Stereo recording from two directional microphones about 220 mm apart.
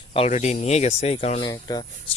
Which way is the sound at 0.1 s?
30° left (ahead or behind).